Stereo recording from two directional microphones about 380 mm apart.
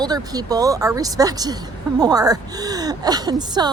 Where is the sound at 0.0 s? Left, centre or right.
Centre.